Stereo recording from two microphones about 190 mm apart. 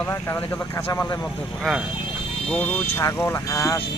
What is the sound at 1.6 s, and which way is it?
Speech, centre (ahead or behind).